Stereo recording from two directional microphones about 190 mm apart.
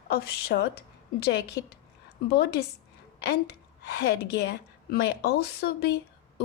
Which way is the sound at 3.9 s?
55° left (ahead or behind).